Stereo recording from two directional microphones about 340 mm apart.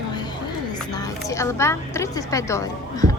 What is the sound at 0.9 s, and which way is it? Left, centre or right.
A woman's voice, centre.